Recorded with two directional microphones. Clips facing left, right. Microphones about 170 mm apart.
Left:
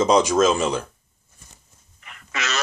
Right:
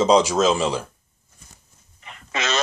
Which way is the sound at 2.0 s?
25° right (ahead or behind).